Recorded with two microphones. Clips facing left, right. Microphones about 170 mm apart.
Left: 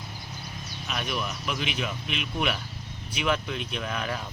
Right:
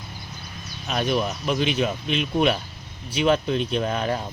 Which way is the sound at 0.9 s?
35° right (ahead or behind).